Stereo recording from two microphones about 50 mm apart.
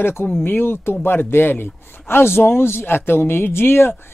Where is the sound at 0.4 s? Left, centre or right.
Left.